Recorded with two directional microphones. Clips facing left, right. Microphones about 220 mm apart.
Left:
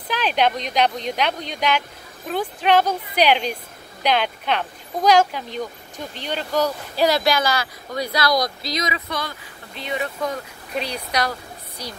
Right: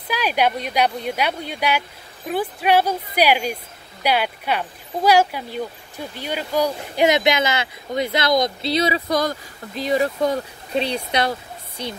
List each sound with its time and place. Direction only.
0.1 s speech: 10° right (ahead or behind); by 11.9 s 25° right (ahead or behind)